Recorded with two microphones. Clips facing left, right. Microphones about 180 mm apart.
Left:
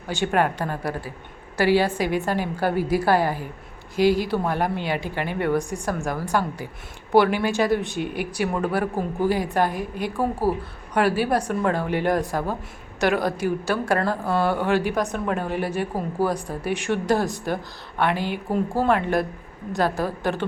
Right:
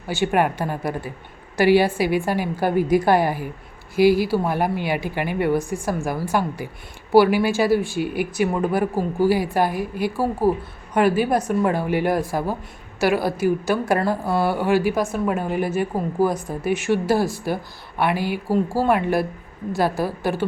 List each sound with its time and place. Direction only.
0.3 s a woman's voice: 10° right (ahead or behind)